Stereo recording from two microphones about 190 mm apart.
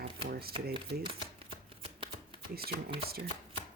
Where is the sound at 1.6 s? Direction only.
30° right (ahead or behind).